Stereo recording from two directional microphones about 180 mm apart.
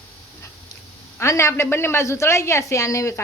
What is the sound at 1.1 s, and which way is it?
A man's voice, 15° left (ahead or behind).